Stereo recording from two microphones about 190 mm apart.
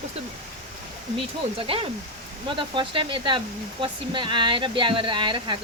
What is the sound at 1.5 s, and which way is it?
Speech, 30° right (ahead or behind).